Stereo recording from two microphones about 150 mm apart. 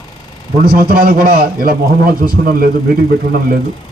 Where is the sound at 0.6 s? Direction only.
90° right.